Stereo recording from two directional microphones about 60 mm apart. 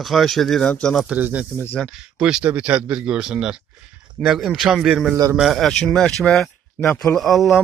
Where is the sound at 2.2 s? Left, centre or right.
Centre.